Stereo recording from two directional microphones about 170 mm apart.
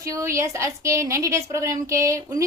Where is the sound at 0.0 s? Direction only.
20° right (ahead or behind).